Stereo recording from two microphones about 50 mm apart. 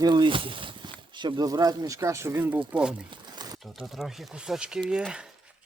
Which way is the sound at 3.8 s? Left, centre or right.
Centre.